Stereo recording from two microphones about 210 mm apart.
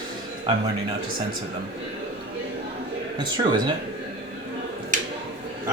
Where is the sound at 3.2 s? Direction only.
20° right (ahead or behind).